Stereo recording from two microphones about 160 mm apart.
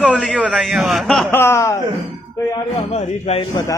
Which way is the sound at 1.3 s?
15° left (ahead or behind).